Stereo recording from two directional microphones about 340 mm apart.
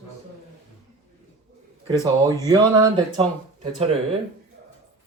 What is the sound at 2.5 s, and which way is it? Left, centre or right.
Speech, centre.